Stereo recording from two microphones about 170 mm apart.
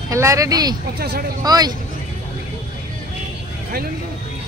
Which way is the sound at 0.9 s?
70° right (ahead or behind).